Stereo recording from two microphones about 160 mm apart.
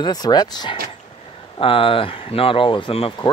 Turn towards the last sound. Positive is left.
turn(degrees=30)  # may be behind; listen again after turning